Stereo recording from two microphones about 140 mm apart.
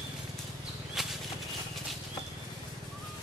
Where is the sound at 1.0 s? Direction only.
Centre (ahead or behind).